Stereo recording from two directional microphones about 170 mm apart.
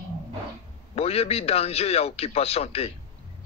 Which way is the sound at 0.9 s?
35° left (ahead or behind).